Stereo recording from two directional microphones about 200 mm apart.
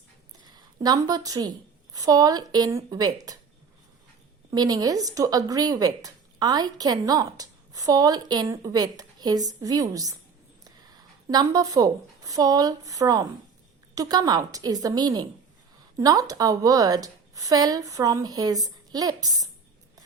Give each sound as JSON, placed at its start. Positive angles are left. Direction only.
{"t": 0.4, "sound": "a woman's voice", "side_deg": -20}
{"t": 4.5, "sound": "a woman's voice", "side_deg": -20}